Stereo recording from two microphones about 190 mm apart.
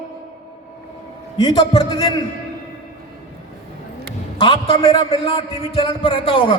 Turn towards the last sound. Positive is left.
turn(degrees=30)  # may be behind; listen again after turning